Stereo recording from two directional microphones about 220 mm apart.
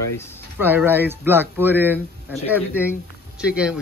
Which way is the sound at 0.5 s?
10° right (ahead or behind).